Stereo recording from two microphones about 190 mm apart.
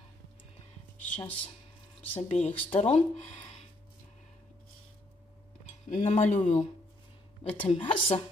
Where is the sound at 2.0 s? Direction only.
35° left (ahead or behind).